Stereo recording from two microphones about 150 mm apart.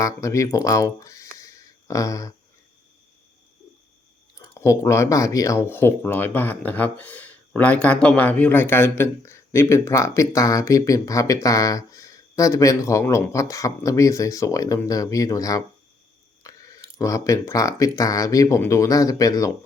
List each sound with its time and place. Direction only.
0.0 s speech: 20° left (ahead or behind)
4.4 s speech: 20° left (ahead or behind)